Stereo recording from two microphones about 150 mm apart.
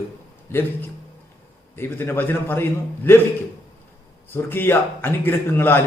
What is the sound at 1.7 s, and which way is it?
A man's voice, 15° left (ahead or behind).